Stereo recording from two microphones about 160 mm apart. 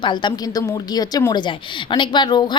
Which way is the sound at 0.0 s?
30° left (ahead or behind).